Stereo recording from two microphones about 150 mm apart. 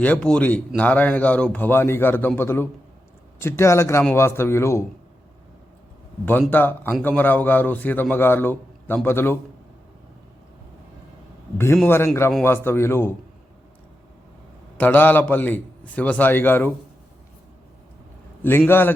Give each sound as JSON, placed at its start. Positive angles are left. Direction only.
{"t": 0.0, "sound": "a man's voice", "side_deg": 5}
{"t": 6.5, "sound": "a man's voice", "side_deg": 10}
{"t": 11.5, "sound": "a man's voice", "side_deg": 15}
{"t": 14.8, "sound": "a man's voice", "side_deg": 10}
{"t": 18.4, "sound": "a man's voice", "side_deg": 15}